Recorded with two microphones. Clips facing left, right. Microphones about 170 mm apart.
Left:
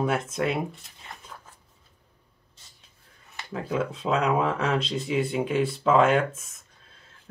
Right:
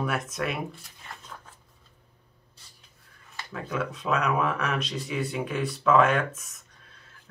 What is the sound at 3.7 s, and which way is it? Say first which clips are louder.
Speech: left 2 dB; 25° left (ahead or behind).